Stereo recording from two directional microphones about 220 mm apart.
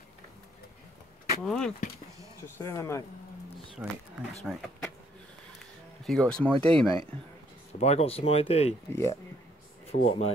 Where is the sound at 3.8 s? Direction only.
5° right (ahead or behind).